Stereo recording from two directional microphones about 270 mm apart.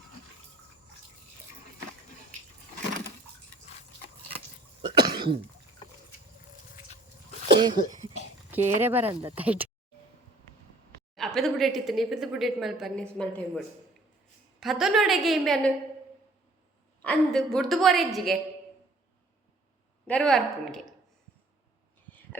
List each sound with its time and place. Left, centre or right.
4.9 s cough: centre
7.4 s speech: centre
11.1 s speech: centre
17.0 s speech: centre
20.1 s speech: centre